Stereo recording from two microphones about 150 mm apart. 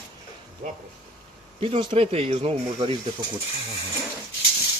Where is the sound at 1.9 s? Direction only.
40° right (ahead or behind).